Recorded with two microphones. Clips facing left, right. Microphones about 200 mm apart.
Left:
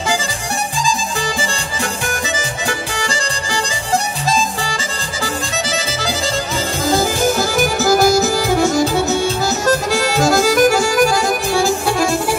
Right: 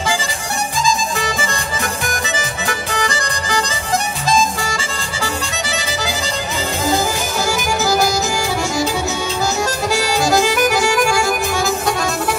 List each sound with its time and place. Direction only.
2.9 s music: 30° left (ahead or behind)
4.3 s harmonica: 35° left (ahead or behind)
6.9 s music: 50° left (ahead or behind)
9.7 s accordion: 50° left (ahead or behind); by 12.1 s 30° left (ahead or behind)